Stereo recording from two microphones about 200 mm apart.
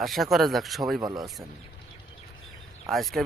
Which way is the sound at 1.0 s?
20° right (ahead or behind).